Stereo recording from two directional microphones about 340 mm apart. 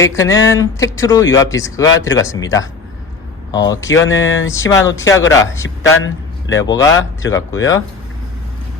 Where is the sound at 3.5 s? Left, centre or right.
Centre.